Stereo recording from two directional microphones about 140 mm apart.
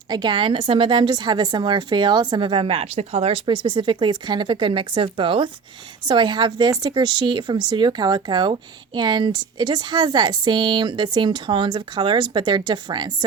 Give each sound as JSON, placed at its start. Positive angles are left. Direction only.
{"t": 0.1, "sound": "a woman's voice", "side_deg": -30}